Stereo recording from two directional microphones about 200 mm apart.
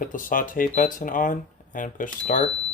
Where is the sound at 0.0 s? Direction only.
40° left (ahead or behind).